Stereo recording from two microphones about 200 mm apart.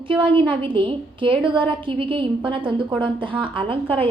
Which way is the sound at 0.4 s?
25° right (ahead or behind).